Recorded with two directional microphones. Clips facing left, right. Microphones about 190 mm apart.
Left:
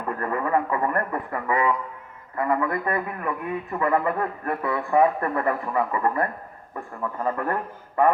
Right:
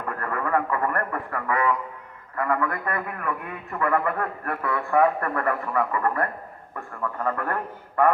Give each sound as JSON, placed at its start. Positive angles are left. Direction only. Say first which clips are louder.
{"t": 0.2, "sound": "a man's voice", "louder": "left 1 dB", "side_deg": 20}